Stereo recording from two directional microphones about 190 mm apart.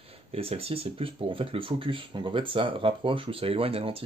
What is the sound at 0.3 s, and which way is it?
Speech, 30° right (ahead or behind).